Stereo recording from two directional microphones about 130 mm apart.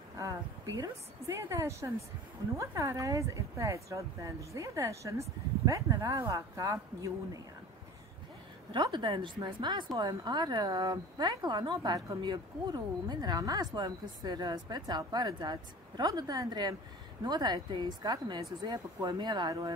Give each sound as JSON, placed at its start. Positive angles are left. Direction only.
{"t": 0.2, "sound": "speech", "side_deg": -25}
{"t": 8.7, "sound": "speech", "side_deg": -35}